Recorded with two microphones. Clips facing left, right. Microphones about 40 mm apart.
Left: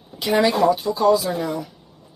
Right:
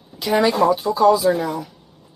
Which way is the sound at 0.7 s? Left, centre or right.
Centre.